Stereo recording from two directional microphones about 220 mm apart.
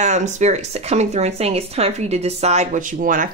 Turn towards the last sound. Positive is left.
turn(degrees=-40)  # may be behind; listen again after turning